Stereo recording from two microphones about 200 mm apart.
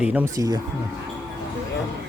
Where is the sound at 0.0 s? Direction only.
5° right (ahead or behind).